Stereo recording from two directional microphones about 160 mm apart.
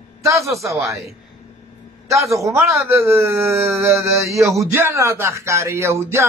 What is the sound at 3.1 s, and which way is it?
A man's voice, 15° right (ahead or behind).